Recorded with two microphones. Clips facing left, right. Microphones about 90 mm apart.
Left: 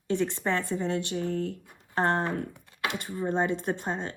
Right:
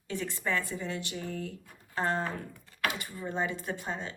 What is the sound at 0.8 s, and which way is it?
A woman's voice, 55° left (ahead or behind).